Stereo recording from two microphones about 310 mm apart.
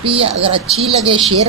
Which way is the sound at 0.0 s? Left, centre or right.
Centre.